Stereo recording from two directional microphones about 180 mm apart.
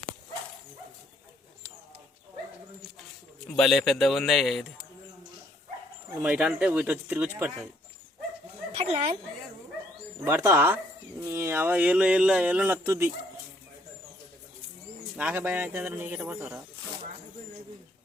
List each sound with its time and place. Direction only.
3.0 s speech: centre (ahead or behind)
6.2 s speech: 5° right (ahead or behind)
8.7 s speech: 35° right (ahead or behind)
10.2 s speech: 15° right (ahead or behind)
15.1 s speech: 10° right (ahead or behind)